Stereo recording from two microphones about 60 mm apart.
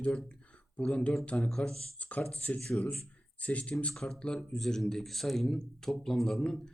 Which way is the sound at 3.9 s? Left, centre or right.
Centre.